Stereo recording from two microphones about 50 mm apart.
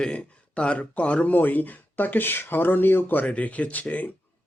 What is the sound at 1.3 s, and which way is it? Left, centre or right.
Speech, left.